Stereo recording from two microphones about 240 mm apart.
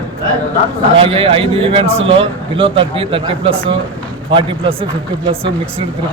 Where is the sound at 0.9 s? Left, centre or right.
Right.